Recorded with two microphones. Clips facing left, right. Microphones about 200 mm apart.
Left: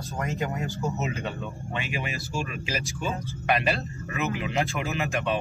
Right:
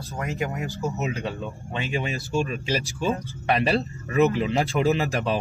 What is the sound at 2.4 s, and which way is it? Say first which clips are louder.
Speech: right 5 dB; 35° right (ahead or behind).